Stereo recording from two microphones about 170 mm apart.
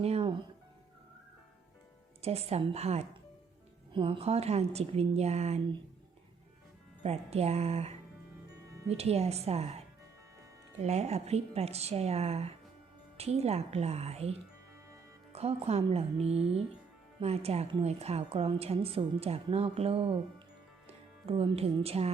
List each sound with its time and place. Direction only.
0.0 s music: 35° right (ahead or behind)
2.2 s a woman's voice: 35° right (ahead or behind)
7.0 s a woman's voice: 40° right (ahead or behind)